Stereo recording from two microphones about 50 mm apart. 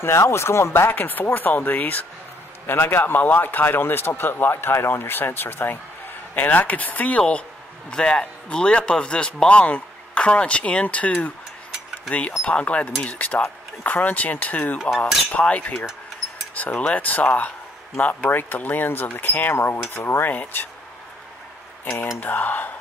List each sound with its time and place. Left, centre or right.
0.0 s speech: left
2.6 s speech: left
14.9 s speech: left
19.5 s speech: left
20.2 s speech: left
22.2 s speech: left